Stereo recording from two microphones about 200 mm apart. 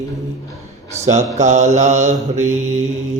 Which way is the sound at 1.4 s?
35° right (ahead or behind).